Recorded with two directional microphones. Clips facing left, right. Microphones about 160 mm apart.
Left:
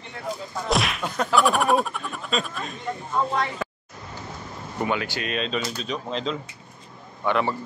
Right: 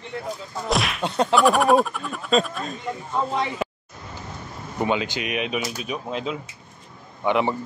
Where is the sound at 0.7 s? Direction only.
Centre (ahead or behind).